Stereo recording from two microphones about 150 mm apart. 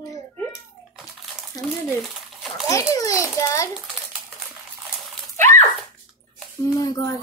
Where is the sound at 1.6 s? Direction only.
25° left (ahead or behind).